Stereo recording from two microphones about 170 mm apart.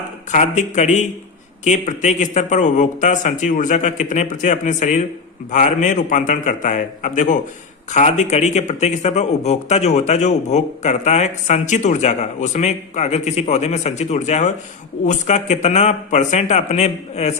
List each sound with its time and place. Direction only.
0.3 s speech: 45° left (ahead or behind)